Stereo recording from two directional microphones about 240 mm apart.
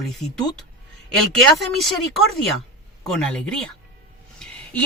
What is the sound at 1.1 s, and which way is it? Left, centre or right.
Speech, centre.